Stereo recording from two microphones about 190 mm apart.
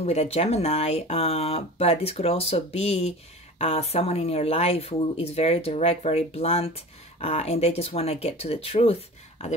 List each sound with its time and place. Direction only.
0.0 s speech: 35° left (ahead or behind)